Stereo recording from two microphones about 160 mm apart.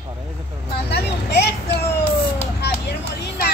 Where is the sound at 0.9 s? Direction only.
90° left.